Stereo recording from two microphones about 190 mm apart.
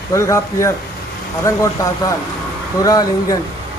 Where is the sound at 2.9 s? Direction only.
20° left (ahead or behind).